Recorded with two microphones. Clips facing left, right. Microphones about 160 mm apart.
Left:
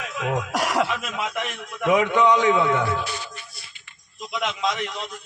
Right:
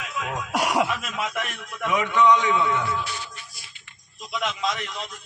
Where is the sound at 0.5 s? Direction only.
5° right (ahead or behind).